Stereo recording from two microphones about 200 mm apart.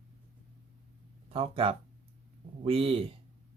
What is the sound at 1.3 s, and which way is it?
Speech, 25° right (ahead or behind).